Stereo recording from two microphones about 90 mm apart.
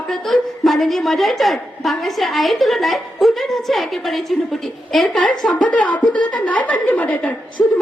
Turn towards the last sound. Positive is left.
turn(degrees=10)  # may be behind; listen again after turning